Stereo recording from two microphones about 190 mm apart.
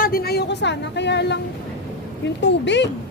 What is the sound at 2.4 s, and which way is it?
Speech, 65° left (ahead or behind).